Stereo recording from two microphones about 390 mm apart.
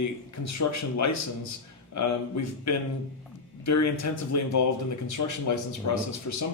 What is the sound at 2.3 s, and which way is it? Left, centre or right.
A man's voice, left.